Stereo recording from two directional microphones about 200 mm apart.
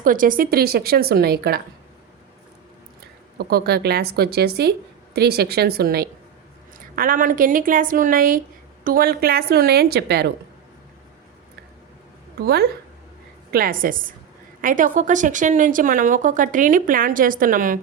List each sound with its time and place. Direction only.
0.0 s a woman's voice: 45° right (ahead or behind)
3.3 s a woman's voice: 50° right (ahead or behind)
12.4 s a woman's voice: 55° right (ahead or behind)